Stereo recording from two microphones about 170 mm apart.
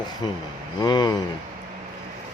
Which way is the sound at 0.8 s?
25° left (ahead or behind).